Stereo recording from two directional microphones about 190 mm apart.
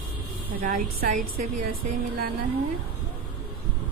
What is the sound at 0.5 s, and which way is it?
A woman's voice, 50° right (ahead or behind).